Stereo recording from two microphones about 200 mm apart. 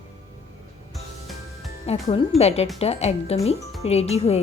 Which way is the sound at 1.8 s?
30° left (ahead or behind).